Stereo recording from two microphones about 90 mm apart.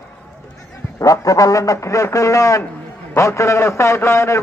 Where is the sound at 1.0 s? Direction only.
40° left (ahead or behind).